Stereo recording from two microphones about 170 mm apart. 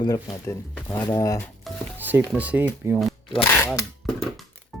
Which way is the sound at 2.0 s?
10° right (ahead or behind).